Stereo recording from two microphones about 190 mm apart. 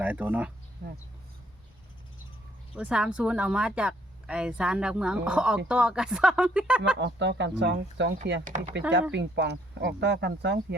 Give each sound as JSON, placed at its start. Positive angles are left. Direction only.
{"t": 0.0, "sound": "speech", "side_deg": -10}
{"t": 2.7, "sound": "speech", "side_deg": -5}
{"t": 7.0, "sound": "speech", "side_deg": -65}
{"t": 8.4, "sound": "speech", "side_deg": -40}
{"t": 9.1, "sound": "speech", "side_deg": -65}